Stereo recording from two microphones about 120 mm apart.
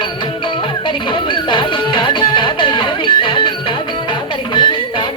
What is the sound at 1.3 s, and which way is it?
Music, 40° left (ahead or behind).